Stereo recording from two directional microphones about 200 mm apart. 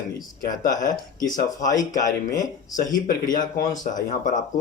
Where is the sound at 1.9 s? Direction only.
40° left (ahead or behind).